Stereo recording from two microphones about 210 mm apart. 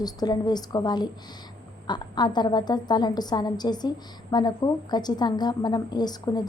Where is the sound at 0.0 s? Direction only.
20° left (ahead or behind).